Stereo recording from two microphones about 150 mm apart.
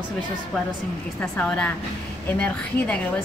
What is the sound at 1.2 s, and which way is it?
Speech, 10° left (ahead or behind).